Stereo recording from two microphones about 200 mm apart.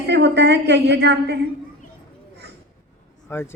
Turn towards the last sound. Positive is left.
turn(degrees=10)  # may be behind; listen again after turning